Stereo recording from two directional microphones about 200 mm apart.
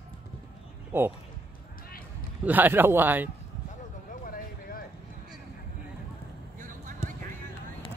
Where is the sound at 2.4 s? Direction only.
10° right (ahead or behind).